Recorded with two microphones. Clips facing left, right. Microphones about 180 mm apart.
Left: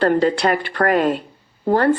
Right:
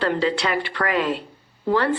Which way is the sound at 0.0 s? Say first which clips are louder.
Left 6 dB; 50° left (ahead or behind).